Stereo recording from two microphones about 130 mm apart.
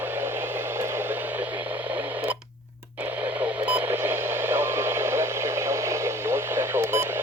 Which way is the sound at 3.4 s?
15° right (ahead or behind).